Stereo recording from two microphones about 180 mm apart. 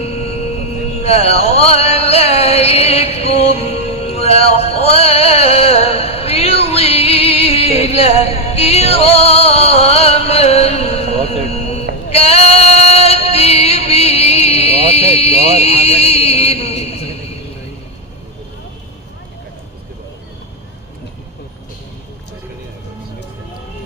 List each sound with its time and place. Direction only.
0.0 s music: 35° left (ahead or behind)